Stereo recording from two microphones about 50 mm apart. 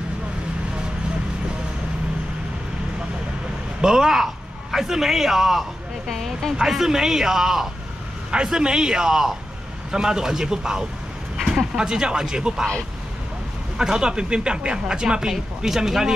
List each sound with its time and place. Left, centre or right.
3.8 s a man's voice: centre
13.7 s speech: centre